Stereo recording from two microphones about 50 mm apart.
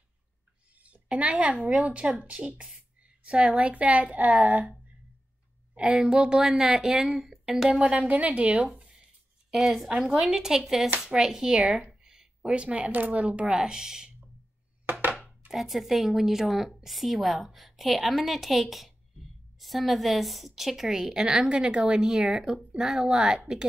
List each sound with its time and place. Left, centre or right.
0.7 s a sound: right
1.0 s a child's voice: right
5.9 s a woman's voice: centre
7.0 s a woman's voice: centre
7.8 s a woman's voice: right
9.5 s a woman's voice: centre
9.8 s a woman's voice: centre
11.9 s a sound: centre
12.4 s a woman's voice: right
13.5 s a woman's voice: centre
14.9 s a sound: right
15.1 s chopping: right
15.5 s a woman's voice: centre